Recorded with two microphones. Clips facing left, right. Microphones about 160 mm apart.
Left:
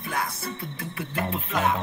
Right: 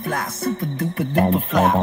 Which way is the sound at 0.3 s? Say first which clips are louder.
Right 11 dB; 45° right (ahead or behind).